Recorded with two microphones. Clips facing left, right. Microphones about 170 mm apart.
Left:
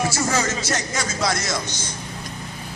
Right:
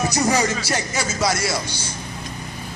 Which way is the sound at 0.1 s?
15° right (ahead or behind).